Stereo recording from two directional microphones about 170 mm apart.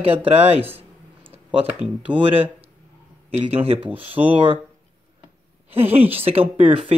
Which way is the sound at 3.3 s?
35° right (ahead or behind).